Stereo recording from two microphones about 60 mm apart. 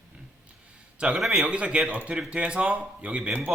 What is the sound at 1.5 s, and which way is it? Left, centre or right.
Speech, centre.